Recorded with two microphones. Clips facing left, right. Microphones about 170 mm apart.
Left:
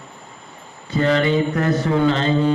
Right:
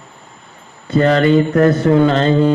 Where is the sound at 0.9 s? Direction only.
55° right (ahead or behind).